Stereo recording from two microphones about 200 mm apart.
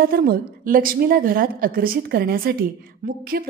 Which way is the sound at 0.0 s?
50° right (ahead or behind).